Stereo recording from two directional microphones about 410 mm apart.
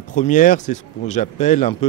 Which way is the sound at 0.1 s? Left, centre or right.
Centre.